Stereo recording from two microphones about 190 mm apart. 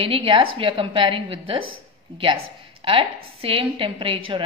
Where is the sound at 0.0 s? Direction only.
30° right (ahead or behind).